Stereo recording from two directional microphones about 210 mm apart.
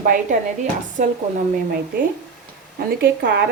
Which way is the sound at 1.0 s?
40° right (ahead or behind).